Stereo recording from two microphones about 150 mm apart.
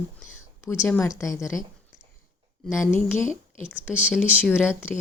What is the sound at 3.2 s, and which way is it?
Speech, 55° left (ahead or behind).